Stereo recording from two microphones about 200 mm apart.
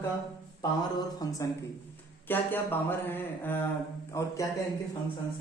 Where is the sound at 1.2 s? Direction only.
15° left (ahead or behind).